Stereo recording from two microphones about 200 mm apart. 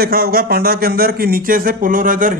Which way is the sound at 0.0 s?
50° right (ahead or behind).